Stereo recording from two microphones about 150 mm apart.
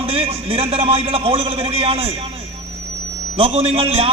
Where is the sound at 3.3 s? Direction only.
40° right (ahead or behind).